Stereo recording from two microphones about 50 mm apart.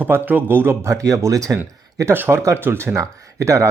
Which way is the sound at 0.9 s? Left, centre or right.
Right.